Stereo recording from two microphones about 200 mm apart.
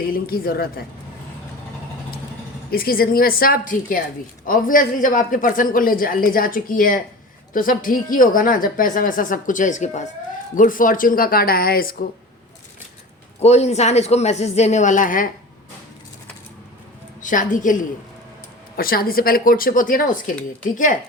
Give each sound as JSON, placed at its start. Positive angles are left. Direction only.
{"t": 0.0, "sound": "speech", "side_deg": 45}
{"t": 2.6, "sound": "speech", "side_deg": 50}
{"t": 13.4, "sound": "a woman's voice", "side_deg": 30}
{"t": 17.2, "sound": "a woman's voice", "side_deg": 40}